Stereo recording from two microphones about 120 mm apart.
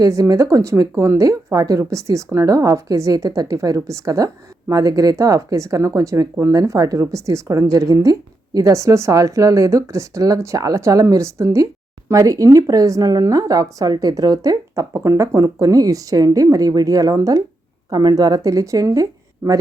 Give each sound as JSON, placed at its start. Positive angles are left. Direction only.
{"t": 0.0, "sound": "speech", "side_deg": -30}